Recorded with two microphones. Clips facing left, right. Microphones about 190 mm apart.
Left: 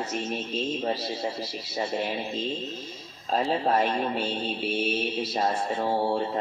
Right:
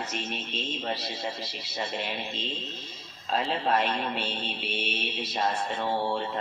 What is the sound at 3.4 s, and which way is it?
Speech, 40° left (ahead or behind).